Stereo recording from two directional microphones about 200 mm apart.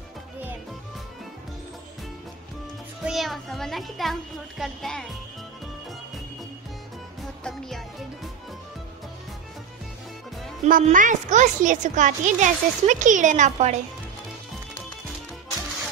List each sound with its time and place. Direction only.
3.0 s a child's voice: centre (ahead or behind)
10.6 s a woman's voice: 40° right (ahead or behind)